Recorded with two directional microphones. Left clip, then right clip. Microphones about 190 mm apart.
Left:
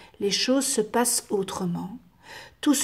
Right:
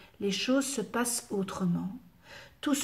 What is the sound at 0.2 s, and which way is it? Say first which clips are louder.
A woman's voice: left 6 dB; 40° left (ahead or behind).